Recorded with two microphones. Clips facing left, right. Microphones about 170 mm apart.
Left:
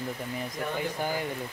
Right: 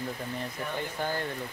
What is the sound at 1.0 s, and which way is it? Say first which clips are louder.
Speech: right 1 dB; 10° left (ahead or behind).